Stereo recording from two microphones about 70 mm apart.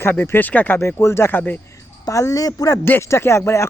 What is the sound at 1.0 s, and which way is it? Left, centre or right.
Speech, left.